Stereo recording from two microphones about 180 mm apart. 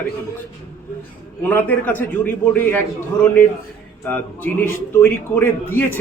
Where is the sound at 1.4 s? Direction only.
10° left (ahead or behind).